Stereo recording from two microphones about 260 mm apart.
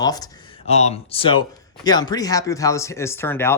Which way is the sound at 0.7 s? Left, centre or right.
Left.